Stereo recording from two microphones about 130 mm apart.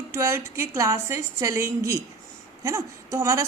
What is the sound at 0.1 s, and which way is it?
Speech, 20° right (ahead or behind).